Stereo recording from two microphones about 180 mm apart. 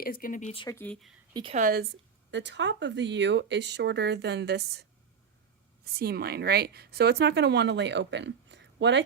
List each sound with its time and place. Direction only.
0.0 s speech: 50° left (ahead or behind)
0.7 s speech: 10° left (ahead or behind)
1.3 s speech: 25° right (ahead or behind)
1.5 s speech: 55° right (ahead or behind); by 9.0 s 75° right (ahead or behind)